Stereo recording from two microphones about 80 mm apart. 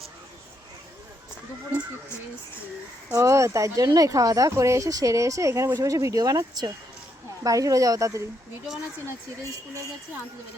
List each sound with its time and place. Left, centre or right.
3.1 s speech: right